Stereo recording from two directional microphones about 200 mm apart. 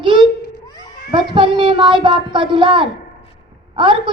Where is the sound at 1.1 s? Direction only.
25° right (ahead or behind).